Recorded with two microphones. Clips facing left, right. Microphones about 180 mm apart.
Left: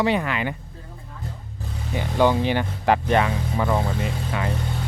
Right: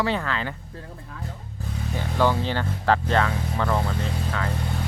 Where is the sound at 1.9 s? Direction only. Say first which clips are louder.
Left 3 dB; 15° left (ahead or behind).